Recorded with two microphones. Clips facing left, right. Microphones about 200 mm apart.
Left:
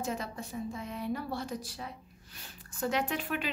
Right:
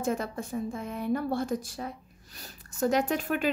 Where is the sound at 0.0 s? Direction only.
50° right (ahead or behind).